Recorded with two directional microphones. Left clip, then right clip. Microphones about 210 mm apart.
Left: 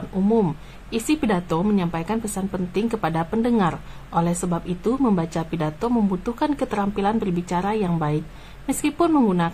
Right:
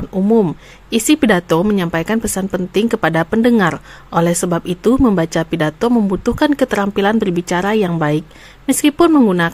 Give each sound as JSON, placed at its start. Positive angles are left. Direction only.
{"t": 0.3, "sound": "speech", "side_deg": -25}